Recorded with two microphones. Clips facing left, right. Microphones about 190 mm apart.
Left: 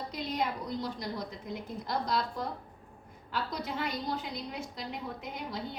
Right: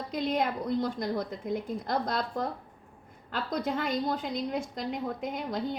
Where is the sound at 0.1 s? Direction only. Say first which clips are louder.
Right 6 dB; 55° right (ahead or behind).